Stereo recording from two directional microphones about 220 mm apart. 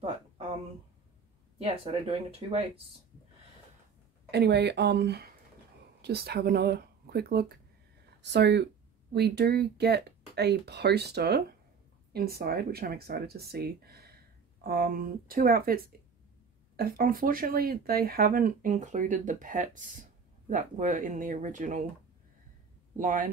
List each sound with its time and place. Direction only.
1.6 s speech: 25° right (ahead or behind)
4.3 s speech: 50° right (ahead or behind)
22.9 s speech: 35° right (ahead or behind)